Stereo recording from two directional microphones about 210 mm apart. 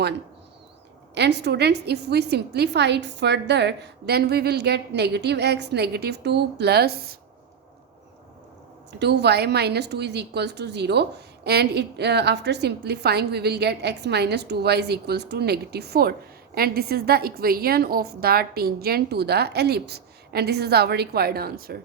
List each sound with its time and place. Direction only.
1.1 s a woman's voice: 55° right (ahead or behind)
9.0 s a woman's voice: 55° right (ahead or behind)